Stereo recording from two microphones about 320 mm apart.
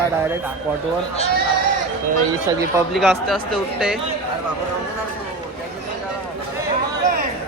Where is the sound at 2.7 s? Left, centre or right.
Centre.